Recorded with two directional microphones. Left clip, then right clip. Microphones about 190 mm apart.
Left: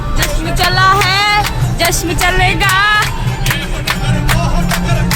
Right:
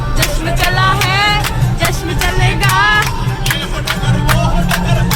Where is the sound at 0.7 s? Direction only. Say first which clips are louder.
Left 4 dB; 35° left (ahead or behind).